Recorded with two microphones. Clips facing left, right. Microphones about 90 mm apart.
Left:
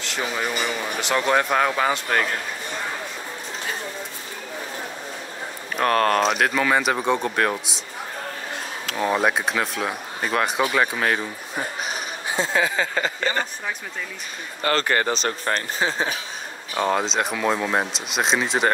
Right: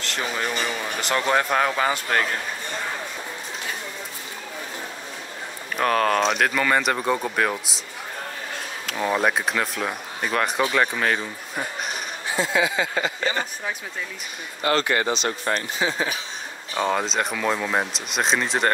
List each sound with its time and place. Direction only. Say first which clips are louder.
0.0 s speech: left 1 dB; centre (ahead or behind)
5.8 s speech: left 1 dB; centre (ahead or behind)
8.8 s speech: left 1 dB; centre (ahead or behind)
12.5 s a sound: even; 40° left (ahead or behind)
14.6 s speech: even; 45° left (ahead or behind)
16.7 s speech: left 1 dB; centre (ahead or behind)